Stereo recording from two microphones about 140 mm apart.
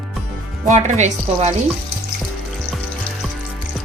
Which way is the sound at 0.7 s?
60° right (ahead or behind).